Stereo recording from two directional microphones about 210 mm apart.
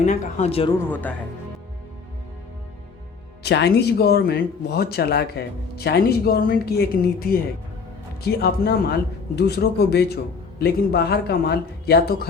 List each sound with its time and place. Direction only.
0.0 s speech: 35° left (ahead or behind)
0.8 s speech: 10° left (ahead or behind)
3.4 s speech: 50° left (ahead or behind)